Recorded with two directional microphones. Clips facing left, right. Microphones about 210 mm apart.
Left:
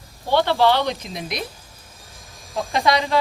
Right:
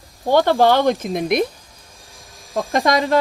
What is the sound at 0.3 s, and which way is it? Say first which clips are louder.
Speech: right 4 dB; 45° right (ahead or behind).